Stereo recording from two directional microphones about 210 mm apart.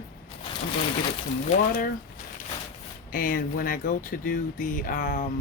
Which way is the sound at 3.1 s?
45° left (ahead or behind).